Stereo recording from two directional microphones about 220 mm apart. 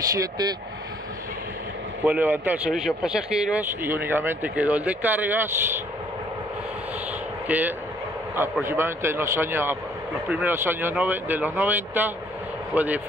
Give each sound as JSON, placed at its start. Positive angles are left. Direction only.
{"t": 0.1, "sound": "speech", "side_deg": -15}
{"t": 2.0, "sound": "speech", "side_deg": -10}
{"t": 7.4, "sound": "speech", "side_deg": -10}